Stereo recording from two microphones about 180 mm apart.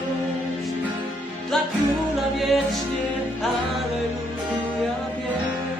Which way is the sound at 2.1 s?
Centre (ahead or behind).